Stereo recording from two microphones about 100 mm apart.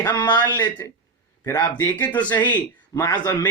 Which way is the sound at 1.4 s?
25° left (ahead or behind).